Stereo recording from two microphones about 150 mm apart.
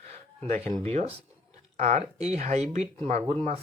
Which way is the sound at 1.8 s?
45° right (ahead or behind).